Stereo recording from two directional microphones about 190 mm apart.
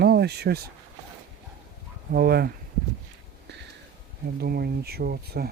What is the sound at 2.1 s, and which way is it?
Speech, 55° right (ahead or behind).